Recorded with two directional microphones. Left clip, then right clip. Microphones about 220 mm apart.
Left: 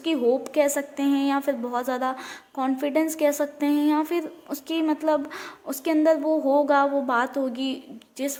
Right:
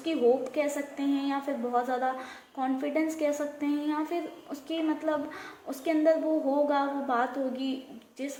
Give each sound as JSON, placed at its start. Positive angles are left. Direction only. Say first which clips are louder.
{"t": 0.0, "sound": "a woman's voice", "louder": "left 3 dB", "side_deg": 45}